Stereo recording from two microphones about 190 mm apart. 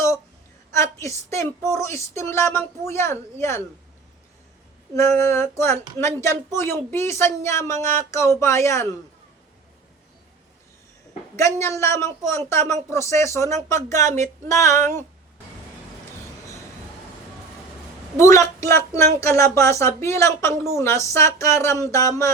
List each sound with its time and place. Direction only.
0.7 s a woman's voice: 15° left (ahead or behind)
4.9 s speech: 15° left (ahead or behind)
11.3 s speech: 15° left (ahead or behind)
18.2 s speech: 15° left (ahead or behind)